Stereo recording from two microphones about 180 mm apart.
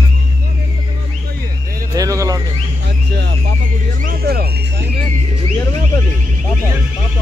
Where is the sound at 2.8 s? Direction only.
70° right (ahead or behind).